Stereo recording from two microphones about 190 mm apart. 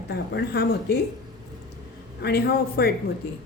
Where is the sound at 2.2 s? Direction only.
55° left (ahead or behind).